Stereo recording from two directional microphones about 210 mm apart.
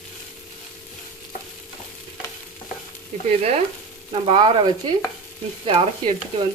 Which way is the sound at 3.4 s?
30° right (ahead or behind).